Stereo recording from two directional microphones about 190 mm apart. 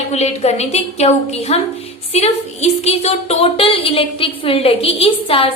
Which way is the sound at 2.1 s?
35° left (ahead or behind).